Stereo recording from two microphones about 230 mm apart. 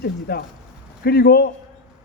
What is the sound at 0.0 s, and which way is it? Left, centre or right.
A man's voice, left.